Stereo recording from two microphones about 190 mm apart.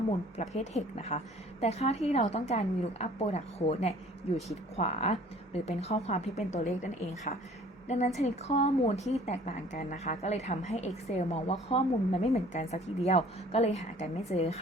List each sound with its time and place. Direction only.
0.3 s speech: 35° left (ahead or behind)